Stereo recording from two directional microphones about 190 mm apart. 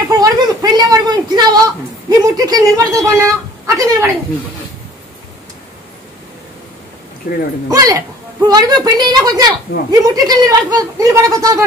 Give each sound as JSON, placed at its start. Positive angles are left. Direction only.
{"t": 0.1, "sound": "a sound", "side_deg": -20}
{"t": 3.8, "sound": "a woman's voice", "side_deg": -15}
{"t": 7.7, "sound": "a woman's voice", "side_deg": -20}